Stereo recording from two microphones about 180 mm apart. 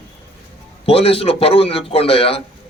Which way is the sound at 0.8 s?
35° left (ahead or behind).